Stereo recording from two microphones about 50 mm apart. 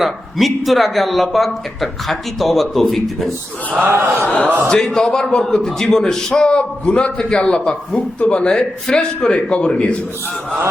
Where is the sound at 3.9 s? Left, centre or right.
Right.